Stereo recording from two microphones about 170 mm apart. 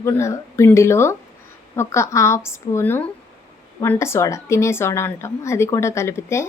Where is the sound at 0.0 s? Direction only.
15° left (ahead or behind).